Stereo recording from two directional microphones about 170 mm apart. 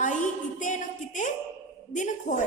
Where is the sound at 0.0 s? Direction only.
45° left (ahead or behind).